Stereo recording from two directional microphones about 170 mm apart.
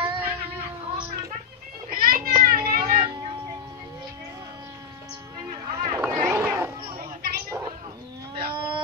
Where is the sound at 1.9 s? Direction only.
55° right (ahead or behind).